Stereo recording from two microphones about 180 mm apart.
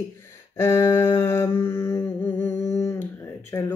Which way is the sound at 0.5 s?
15° left (ahead or behind).